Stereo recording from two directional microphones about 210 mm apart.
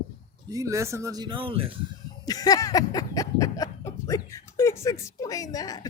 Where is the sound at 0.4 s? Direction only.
15° right (ahead or behind).